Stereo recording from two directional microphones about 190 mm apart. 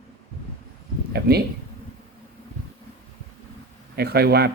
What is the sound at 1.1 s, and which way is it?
Speech, 55° right (ahead or behind).